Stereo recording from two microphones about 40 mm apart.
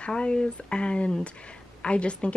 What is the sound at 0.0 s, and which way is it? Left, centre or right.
Speech, left.